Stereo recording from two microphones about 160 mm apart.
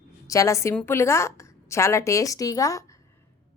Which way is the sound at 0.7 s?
15° left (ahead or behind).